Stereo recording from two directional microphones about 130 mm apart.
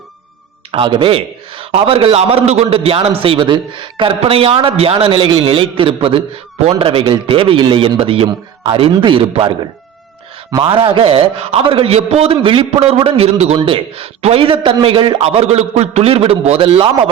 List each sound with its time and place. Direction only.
0.7 s a man's voice: 40° right (ahead or behind)
10.6 s a man's voice: 45° right (ahead or behind)